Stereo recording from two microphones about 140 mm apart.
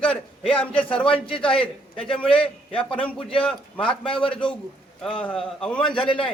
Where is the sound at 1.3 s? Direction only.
40° left (ahead or behind).